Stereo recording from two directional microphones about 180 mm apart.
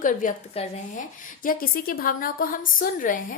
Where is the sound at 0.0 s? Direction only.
45° left (ahead or behind).